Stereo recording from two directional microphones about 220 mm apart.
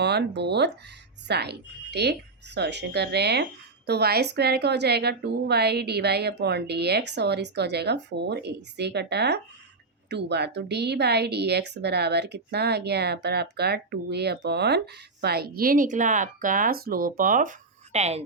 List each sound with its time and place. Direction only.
0.0 s a woman's voice: 50° right (ahead or behind); by 18.2 s 30° right (ahead or behind)